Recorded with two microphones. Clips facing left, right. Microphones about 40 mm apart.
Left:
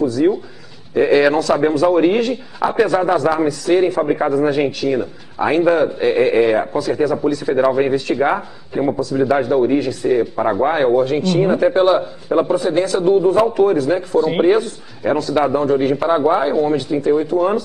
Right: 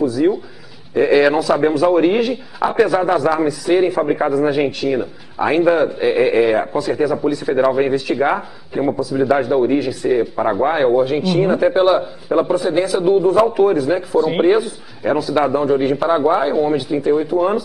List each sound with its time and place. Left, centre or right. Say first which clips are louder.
0.1 s a man's voice: even; centre